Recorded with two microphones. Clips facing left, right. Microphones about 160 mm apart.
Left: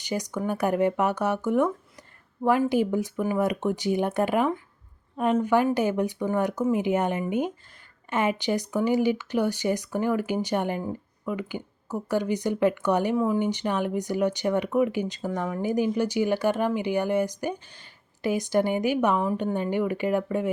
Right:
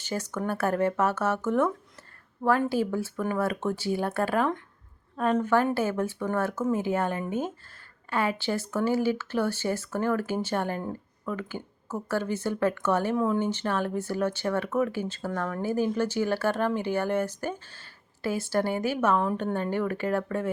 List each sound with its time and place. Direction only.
0.0 s speech: 15° left (ahead or behind)